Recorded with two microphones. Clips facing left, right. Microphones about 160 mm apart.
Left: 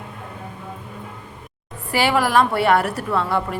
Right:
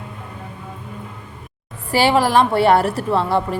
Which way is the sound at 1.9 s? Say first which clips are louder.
Right 3 dB; 30° right (ahead or behind).